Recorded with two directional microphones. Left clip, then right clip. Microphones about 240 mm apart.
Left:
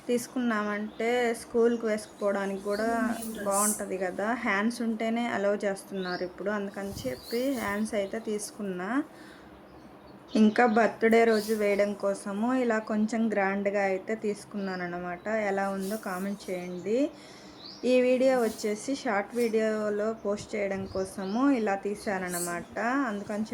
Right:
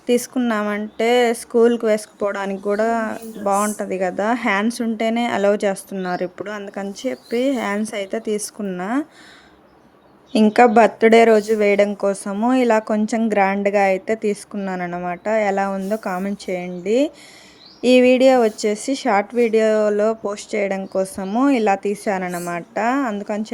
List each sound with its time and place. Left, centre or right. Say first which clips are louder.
0.1 s speech: right 10 dB; right
10.3 s speech: right 11 dB; right